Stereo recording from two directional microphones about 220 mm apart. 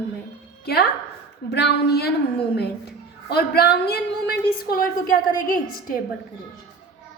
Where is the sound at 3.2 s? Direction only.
45° left (ahead or behind).